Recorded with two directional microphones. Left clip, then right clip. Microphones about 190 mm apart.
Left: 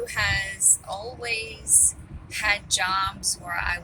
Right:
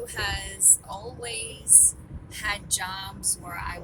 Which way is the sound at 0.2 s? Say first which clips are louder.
Left 6 dB; 10° right (ahead or behind).